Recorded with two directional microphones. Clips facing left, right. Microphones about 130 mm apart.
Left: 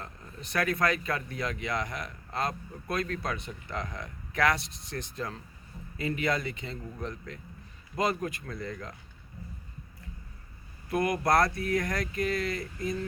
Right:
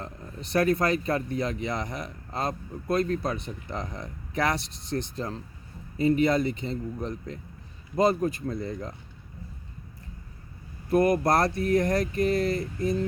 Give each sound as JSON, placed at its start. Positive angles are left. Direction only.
{"t": 0.5, "sound": "speech", "side_deg": -30}
{"t": 10.9, "sound": "speech", "side_deg": -30}